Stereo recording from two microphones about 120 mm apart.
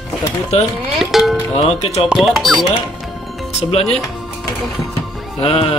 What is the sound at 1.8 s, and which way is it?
Speech, 65° left (ahead or behind).